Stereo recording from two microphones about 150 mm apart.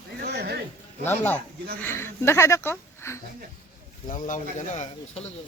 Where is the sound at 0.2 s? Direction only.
90° right.